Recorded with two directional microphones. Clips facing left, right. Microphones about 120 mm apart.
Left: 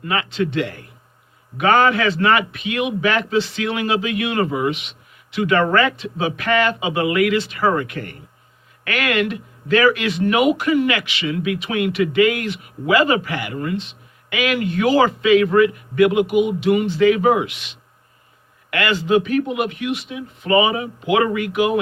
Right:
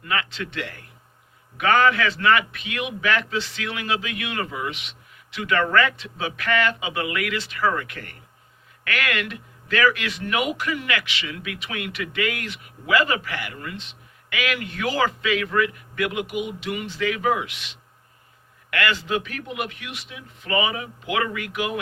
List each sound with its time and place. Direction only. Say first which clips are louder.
0.0 s a man's voice: left 7 dB; 25° left (ahead or behind)
18.7 s a man's voice: left 7 dB; 20° left (ahead or behind)